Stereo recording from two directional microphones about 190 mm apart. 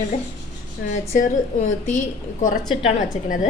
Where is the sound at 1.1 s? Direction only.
45° left (ahead or behind).